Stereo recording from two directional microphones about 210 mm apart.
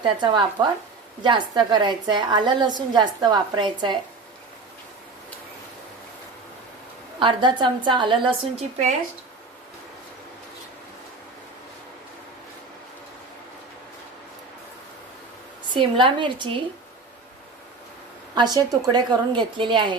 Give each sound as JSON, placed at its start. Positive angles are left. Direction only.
{"t": 0.0, "sound": "a woman's voice", "side_deg": -25}
{"t": 7.2, "sound": "a woman's voice", "side_deg": -20}
{"t": 15.7, "sound": "a woman's voice", "side_deg": -25}
{"t": 18.3, "sound": "a woman's voice", "side_deg": -20}